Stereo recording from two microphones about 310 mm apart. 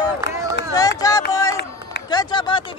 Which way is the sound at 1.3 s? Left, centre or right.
Centre.